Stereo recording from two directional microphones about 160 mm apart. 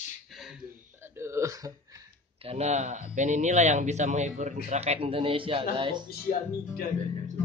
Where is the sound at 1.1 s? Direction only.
15° right (ahead or behind).